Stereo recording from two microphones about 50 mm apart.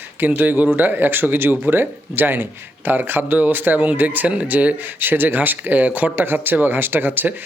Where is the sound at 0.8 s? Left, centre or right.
Right.